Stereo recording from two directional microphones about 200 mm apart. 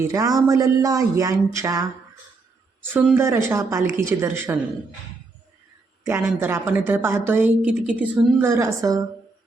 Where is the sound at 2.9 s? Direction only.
10° right (ahead or behind).